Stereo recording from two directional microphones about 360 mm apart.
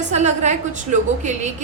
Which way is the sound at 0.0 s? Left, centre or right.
Centre.